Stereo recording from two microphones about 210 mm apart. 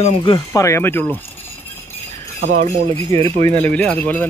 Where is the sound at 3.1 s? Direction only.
30° right (ahead or behind).